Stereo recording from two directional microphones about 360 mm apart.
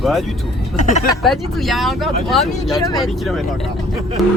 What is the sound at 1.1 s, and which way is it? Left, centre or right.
Speech, centre.